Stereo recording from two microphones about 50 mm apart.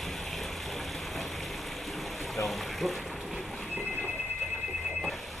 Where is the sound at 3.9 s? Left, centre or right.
Left.